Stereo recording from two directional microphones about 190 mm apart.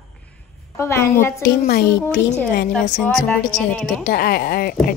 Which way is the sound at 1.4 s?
55° left (ahead or behind).